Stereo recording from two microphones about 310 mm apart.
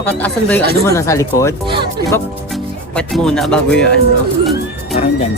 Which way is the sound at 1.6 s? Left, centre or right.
Centre.